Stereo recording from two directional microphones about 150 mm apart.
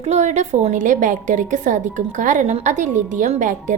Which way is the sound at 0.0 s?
50° right (ahead or behind).